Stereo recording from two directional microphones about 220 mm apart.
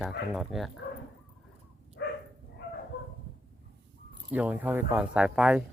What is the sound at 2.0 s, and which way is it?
Dog, 55° left (ahead or behind).